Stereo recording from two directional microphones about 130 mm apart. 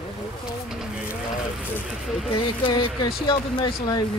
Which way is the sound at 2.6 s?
35° left (ahead or behind).